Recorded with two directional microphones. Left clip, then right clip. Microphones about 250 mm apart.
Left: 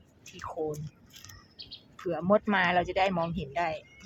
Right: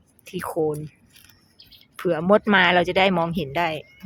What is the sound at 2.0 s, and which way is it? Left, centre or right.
Speech, right.